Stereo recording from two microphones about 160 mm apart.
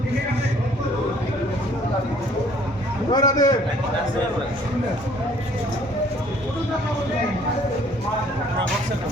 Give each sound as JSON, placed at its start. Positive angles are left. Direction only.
{"t": 3.1, "sound": "a man's voice", "side_deg": 25}